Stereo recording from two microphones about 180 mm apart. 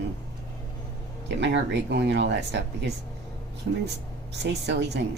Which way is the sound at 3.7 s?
90° right.